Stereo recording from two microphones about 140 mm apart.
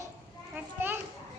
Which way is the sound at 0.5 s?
15° right (ahead or behind).